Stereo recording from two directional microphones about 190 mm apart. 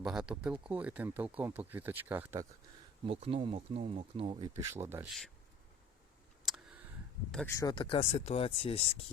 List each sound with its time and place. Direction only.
0.0 s speech: 5° right (ahead or behind)
3.1 s speech: 30° right (ahead or behind); by 5.0 s 10° right (ahead or behind)
6.4 s a sound: centre (ahead or behind)
7.3 s speech: 5° left (ahead or behind)
7.5 s speech: 20° left (ahead or behind)